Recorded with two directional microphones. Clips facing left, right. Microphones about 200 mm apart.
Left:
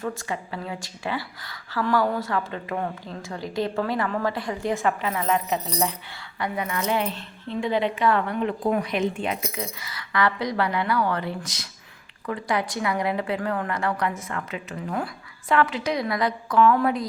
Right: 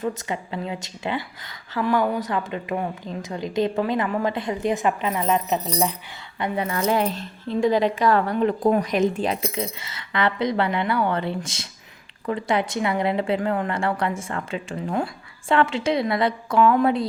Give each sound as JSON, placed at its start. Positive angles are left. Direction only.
{"t": 0.0, "sound": "speech", "side_deg": -20}
{"t": 6.4, "sound": "speech", "side_deg": -30}